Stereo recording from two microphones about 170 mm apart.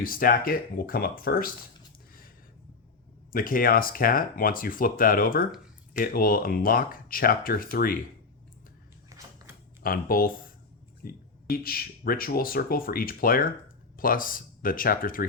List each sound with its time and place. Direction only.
0.0 s speech: 55° left (ahead or behind)
3.3 s speech: 55° left (ahead or behind)
9.0 s a sound: 20° right (ahead or behind)
9.8 s speech: 60° left (ahead or behind)